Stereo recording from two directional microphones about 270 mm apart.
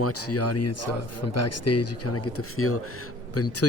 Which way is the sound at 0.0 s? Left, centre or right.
Left.